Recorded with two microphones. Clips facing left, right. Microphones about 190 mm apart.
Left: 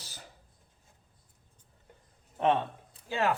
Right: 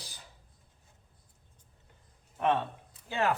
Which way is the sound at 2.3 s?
20° left (ahead or behind).